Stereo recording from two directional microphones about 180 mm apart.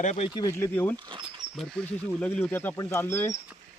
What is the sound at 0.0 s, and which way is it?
Speech, 40° left (ahead or behind).